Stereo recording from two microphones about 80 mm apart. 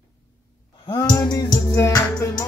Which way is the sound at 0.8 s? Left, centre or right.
Left.